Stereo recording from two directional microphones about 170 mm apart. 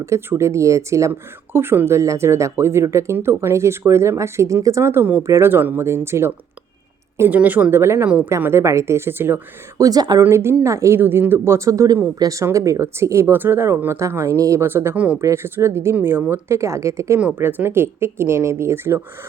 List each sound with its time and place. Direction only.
0.0 s a woman's voice: 15° right (ahead or behind)